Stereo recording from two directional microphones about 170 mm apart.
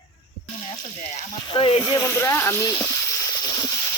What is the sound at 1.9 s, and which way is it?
Speech, 15° left (ahead or behind).